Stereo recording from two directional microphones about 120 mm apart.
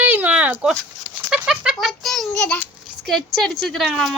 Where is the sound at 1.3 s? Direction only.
10° right (ahead or behind).